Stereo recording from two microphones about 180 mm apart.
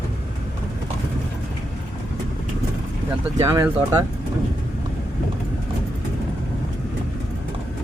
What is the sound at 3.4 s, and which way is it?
Speech, 15° right (ahead or behind).